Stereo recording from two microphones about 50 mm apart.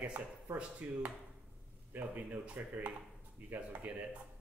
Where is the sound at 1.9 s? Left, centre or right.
Right.